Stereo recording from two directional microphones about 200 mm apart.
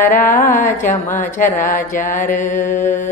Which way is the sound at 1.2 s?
40° left (ahead or behind).